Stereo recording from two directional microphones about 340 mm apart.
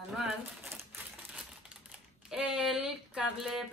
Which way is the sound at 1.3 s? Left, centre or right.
Centre.